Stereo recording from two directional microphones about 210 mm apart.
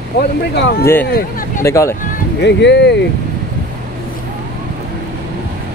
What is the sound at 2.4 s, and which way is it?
Speech, 55° left (ahead or behind).